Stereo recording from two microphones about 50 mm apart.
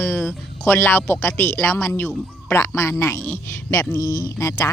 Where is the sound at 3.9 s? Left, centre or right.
Left.